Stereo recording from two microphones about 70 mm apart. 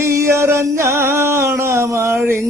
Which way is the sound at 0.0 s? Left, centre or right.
Right.